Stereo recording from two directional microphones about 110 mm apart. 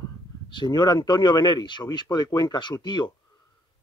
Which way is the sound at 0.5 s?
45° left (ahead or behind).